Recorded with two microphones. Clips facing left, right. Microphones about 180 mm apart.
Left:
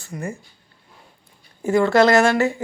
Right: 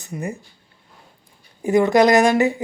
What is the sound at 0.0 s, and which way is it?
Speech, 20° right (ahead or behind).